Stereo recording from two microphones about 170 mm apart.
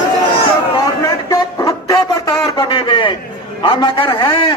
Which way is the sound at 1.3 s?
20° left (ahead or behind).